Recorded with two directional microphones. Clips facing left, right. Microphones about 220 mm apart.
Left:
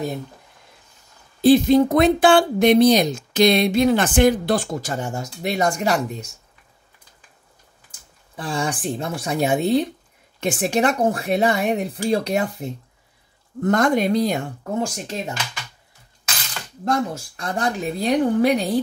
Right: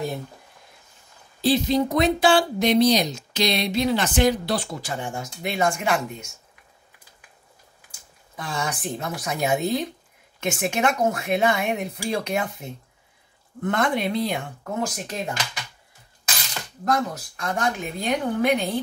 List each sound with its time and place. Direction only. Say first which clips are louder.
1.4 s speech: left 7 dB; 50° left (ahead or behind); by 6.3 s 35° left (ahead or behind)
8.4 s a woman's voice: left 4 dB; 30° left (ahead or behind)
14.7 s speech: left 3 dB; 30° left (ahead or behind)
16.8 s a woman's voice: left 2 dB; 30° left (ahead or behind)